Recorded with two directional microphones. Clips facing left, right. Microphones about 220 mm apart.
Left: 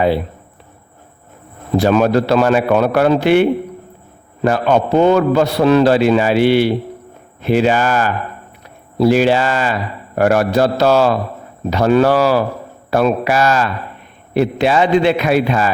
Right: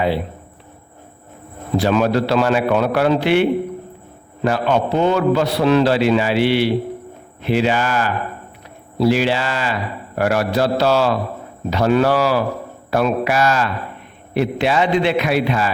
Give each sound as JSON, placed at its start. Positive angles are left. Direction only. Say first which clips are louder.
{"t": 1.7, "sound": "a man's voice", "louder": "left 4 dB", "side_deg": 50}
{"t": 4.4, "sound": "a man's voice", "louder": "left 3 dB", "side_deg": 45}